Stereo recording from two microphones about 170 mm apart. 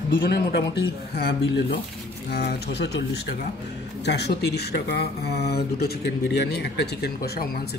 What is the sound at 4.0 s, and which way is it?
Speech, 80° left.